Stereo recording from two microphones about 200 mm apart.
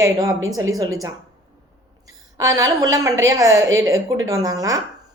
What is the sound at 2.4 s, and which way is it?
A woman's voice, 15° right (ahead or behind).